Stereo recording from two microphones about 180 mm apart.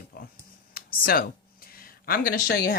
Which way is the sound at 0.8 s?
55° left (ahead or behind).